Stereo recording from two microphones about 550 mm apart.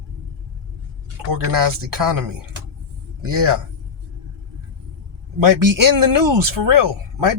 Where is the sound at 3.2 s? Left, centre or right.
Right.